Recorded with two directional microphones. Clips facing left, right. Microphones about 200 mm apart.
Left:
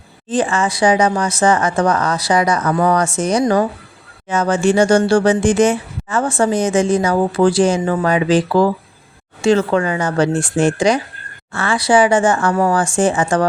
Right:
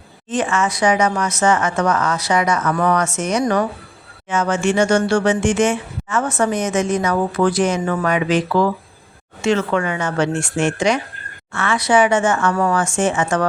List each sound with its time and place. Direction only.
0.3 s speech: 30° left (ahead or behind)